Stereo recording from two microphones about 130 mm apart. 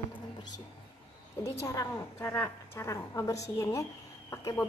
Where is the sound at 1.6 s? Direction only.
20° left (ahead or behind).